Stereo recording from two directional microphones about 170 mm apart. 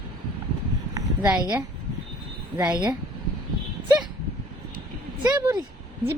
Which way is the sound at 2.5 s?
25° right (ahead or behind).